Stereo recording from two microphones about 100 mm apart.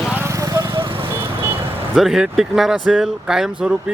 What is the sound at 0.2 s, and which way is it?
Vehicle, 30° right (ahead or behind).